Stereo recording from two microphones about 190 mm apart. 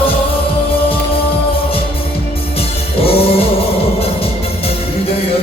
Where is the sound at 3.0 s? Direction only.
30° left (ahead or behind).